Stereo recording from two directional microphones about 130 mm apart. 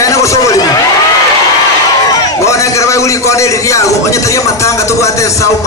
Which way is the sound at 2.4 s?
25° left (ahead or behind).